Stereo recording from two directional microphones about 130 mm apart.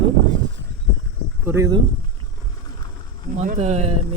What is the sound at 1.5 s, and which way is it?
Speech, 20° right (ahead or behind).